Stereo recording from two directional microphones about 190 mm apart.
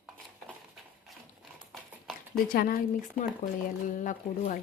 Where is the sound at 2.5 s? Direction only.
45° left (ahead or behind).